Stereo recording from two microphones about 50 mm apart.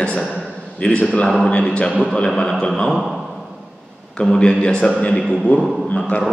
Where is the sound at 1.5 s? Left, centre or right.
Left.